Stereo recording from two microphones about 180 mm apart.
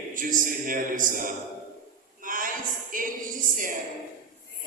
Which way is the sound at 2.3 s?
50° right (ahead or behind).